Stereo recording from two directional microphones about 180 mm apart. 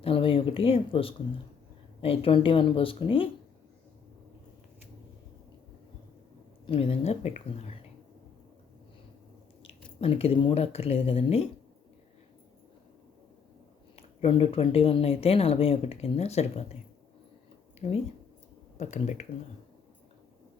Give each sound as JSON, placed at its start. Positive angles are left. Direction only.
{"t": 0.0, "sound": "speech", "side_deg": 30}
{"t": 6.7, "sound": "speech", "side_deg": 30}
{"t": 10.0, "sound": "speech", "side_deg": 35}
{"t": 13.9, "sound": "speech", "side_deg": 30}
{"t": 17.7, "sound": "speech", "side_deg": 35}